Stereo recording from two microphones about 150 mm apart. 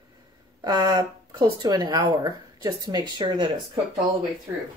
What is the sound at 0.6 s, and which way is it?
Speech, 25° right (ahead or behind).